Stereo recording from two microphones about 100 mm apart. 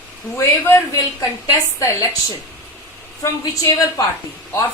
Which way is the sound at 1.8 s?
30° left (ahead or behind).